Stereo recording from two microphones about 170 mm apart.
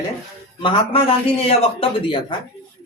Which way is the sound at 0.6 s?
30° left (ahead or behind).